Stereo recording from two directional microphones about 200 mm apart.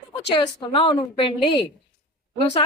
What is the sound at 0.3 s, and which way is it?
A woman's voice, 25° left (ahead or behind).